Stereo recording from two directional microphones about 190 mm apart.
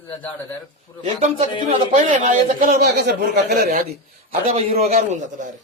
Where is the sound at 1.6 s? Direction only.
40° right (ahead or behind).